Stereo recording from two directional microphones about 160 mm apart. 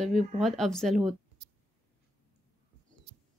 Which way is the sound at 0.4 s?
Centre (ahead or behind).